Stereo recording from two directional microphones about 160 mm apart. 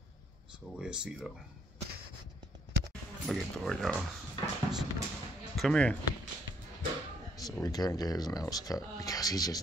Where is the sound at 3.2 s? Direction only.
5° left (ahead or behind).